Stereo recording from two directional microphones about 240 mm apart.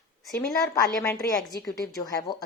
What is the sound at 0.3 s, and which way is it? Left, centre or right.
Speech, centre.